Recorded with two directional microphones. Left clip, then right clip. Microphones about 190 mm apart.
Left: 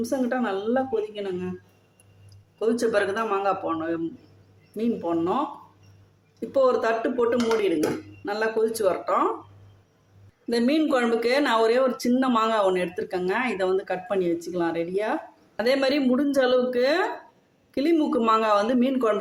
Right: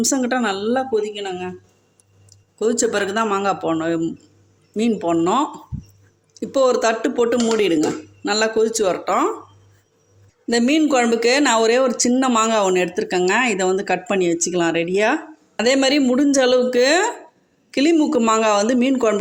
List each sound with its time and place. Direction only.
0.0 s a man's voice: 50° right (ahead or behind)
10.5 s speech: 40° right (ahead or behind)